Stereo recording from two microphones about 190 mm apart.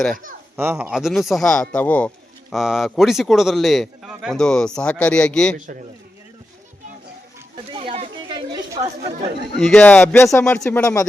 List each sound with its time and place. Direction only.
0.5 s speech: 10° right (ahead or behind); by 5.5 s 5° left (ahead or behind)
7.7 s a sound: 30° right (ahead or behind)
9.6 s speech: 5° left (ahead or behind)